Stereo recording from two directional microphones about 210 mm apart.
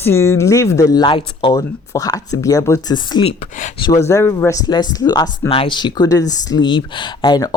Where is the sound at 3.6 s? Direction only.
35° left (ahead or behind).